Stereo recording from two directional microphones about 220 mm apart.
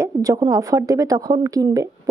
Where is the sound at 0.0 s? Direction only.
15° right (ahead or behind).